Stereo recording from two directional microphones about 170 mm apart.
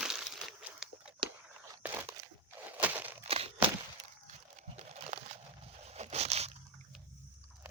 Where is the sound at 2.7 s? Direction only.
10° right (ahead or behind).